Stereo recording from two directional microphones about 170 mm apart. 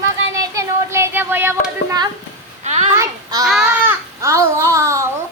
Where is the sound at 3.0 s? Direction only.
20° right (ahead or behind).